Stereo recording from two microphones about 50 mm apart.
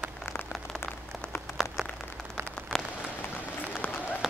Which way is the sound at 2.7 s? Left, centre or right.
Centre.